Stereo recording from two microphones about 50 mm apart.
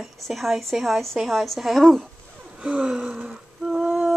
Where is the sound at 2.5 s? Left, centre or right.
Centre.